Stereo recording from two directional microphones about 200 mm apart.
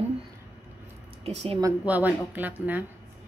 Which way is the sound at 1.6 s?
10° right (ahead or behind).